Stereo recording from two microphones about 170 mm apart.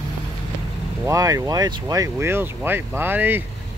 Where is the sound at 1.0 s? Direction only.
20° right (ahead or behind).